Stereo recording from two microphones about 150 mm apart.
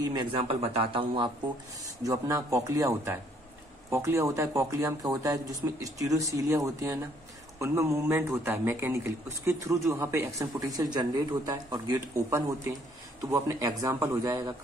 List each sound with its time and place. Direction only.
0.0 s speech: 30° right (ahead or behind)
2.0 s a man's voice: 20° right (ahead or behind)